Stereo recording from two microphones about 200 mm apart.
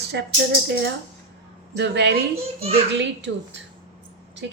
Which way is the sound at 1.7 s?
55° right (ahead or behind).